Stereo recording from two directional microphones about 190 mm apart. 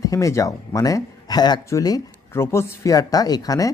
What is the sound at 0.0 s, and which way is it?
Speech, 15° left (ahead or behind).